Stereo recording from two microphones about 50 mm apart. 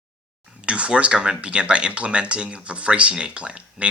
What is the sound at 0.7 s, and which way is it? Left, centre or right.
Speech, right.